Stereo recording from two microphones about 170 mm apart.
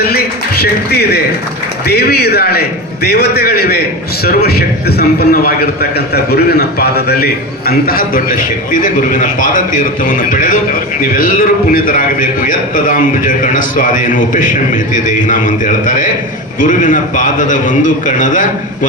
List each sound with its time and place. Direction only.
0.6 s a man's voice: 70° left (ahead or behind); by 18.9 s 50° left (ahead or behind)